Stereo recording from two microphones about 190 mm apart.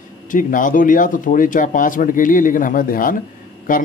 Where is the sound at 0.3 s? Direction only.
45° left (ahead or behind).